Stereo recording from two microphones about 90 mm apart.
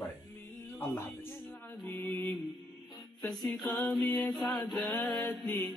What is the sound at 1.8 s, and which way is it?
Mantra, 20° left (ahead or behind).